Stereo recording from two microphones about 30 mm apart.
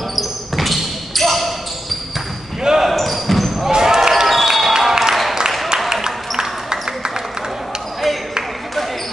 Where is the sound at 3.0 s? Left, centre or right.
Centre.